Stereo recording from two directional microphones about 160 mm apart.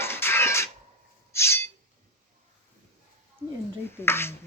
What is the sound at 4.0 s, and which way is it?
Speech, 15° left (ahead or behind).